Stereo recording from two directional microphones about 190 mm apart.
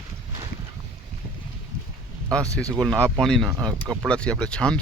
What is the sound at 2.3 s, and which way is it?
Speech, 5° left (ahead or behind).